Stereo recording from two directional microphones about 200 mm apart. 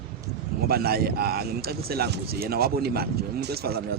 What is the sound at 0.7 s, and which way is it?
Speech, 50° right (ahead or behind).